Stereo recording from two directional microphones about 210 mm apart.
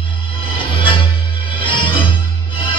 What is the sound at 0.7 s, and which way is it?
Music, 25° left (ahead or behind).